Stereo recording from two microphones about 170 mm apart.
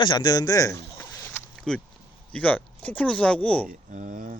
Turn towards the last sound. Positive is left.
turn(degrees=-50)  # may be behind; listen again after turning